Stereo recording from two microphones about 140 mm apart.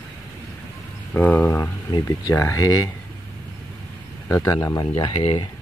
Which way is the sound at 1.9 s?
25° left (ahead or behind).